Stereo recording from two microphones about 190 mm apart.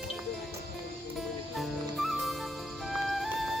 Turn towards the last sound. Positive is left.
turn(degrees=0)  # may be behind; listen again after turning